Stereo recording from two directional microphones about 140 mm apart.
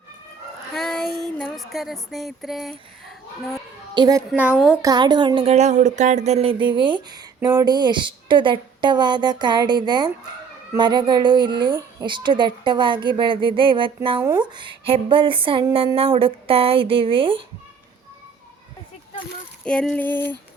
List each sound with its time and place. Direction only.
0.7 s child singing: 5° left (ahead or behind)
3.9 s a child's voice: 30° right (ahead or behind)
4.3 s child singing: 5° right (ahead or behind)
4.8 s speech: 30° right (ahead or behind)
5.5 s speech: 55° right (ahead or behind); by 14.2 s 35° right (ahead or behind)
14.2 s speech: 15° right (ahead or behind)
14.5 s speech: 35° right (ahead or behind)
19.6 s female singing: 5° left (ahead or behind)